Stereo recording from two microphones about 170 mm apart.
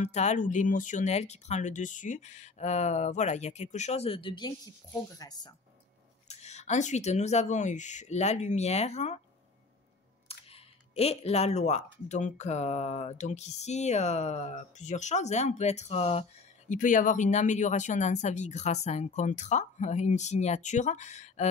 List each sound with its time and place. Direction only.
0.0 s speech: 40° left (ahead or behind); by 5.5 s 20° left (ahead or behind)
6.2 s speech: 40° left (ahead or behind)
10.2 s speech: 35° left (ahead or behind)